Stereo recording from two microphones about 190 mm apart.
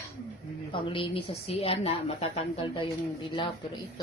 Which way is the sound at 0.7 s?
25° left (ahead or behind).